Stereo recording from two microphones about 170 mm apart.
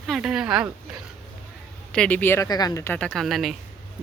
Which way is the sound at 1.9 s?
5° left (ahead or behind).